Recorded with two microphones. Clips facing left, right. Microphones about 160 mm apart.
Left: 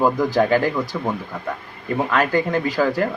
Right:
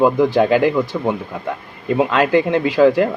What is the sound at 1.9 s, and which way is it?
Speech, 20° right (ahead or behind).